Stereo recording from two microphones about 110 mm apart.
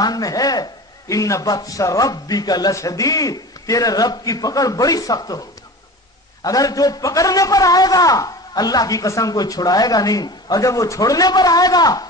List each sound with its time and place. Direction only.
0.0 s a man's voice: 35° left (ahead or behind)
6.4 s a man's voice: 35° left (ahead or behind)